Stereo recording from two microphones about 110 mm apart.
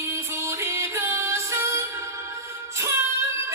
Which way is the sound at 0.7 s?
25° right (ahead or behind).